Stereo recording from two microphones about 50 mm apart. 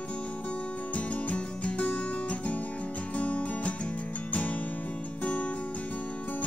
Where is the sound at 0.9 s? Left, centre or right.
Left.